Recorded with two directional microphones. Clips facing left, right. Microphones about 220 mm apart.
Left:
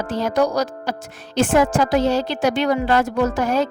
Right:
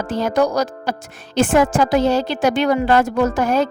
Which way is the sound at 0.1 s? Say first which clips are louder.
Right 2 dB; 50° right (ahead or behind).